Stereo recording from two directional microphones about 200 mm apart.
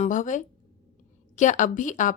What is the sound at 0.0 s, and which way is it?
A woman's voice, 40° left (ahead or behind).